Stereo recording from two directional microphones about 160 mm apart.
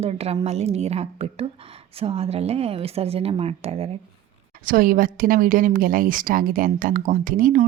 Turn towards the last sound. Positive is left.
turn(degrees=-60)  # may be behind; listen again after turning